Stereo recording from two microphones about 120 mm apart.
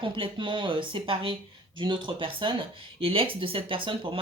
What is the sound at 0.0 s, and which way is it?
Speech, 45° right (ahead or behind).